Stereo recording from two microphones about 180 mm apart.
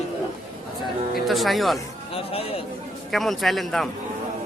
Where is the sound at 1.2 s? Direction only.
Centre (ahead or behind).